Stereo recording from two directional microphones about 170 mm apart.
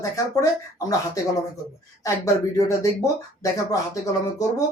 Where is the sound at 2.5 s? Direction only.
20° left (ahead or behind).